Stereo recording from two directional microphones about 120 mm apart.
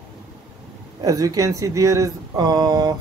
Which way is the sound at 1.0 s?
30° right (ahead or behind).